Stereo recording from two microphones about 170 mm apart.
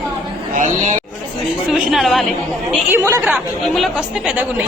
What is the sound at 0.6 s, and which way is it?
Speech, 45° right (ahead or behind).